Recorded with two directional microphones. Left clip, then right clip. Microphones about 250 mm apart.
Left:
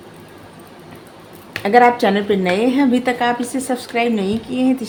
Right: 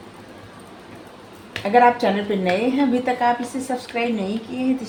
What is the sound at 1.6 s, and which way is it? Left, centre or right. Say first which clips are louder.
Speech: left 3 dB; left.